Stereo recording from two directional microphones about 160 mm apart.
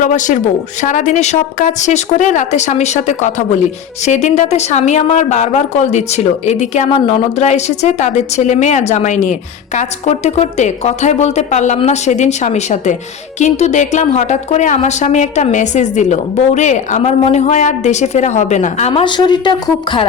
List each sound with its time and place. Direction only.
0.0 s a woman's voice: 50° left (ahead or behind); by 20.1 s 30° left (ahead or behind)